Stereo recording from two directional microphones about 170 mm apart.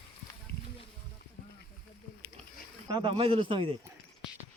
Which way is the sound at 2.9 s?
30° right (ahead or behind).